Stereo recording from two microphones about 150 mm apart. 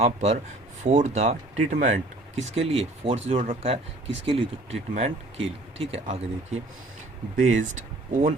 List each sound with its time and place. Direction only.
0.0 s speech: 45° right (ahead or behind)
8.1 s speech: 60° right (ahead or behind)